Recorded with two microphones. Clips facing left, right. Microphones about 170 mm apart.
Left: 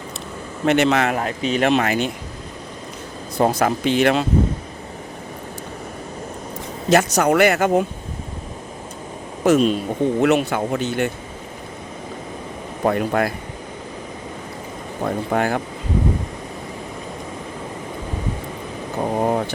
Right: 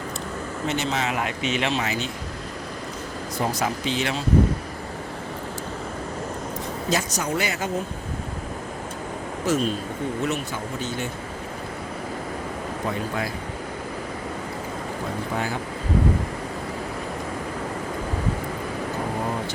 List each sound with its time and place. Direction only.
0.6 s speech: 65° left (ahead or behind)
1.1 s speech: 35° left (ahead or behind)
1.6 s speech: 60° left (ahead or behind)
3.3 s speech: 60° left (ahead or behind)
6.9 s speech: 65° left (ahead or behind)
9.4 s speech: 70° left (ahead or behind)
12.8 s speech: 60° left (ahead or behind)
15.3 s speech: 60° left (ahead or behind)
19.2 s vehicle: 55° left (ahead or behind)